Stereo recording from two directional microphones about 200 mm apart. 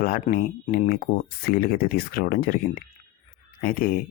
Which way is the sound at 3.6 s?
45° left (ahead or behind).